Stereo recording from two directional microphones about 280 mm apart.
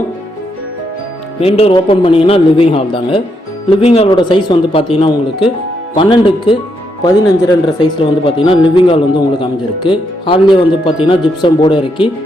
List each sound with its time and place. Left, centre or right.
1.4 s a man's voice: left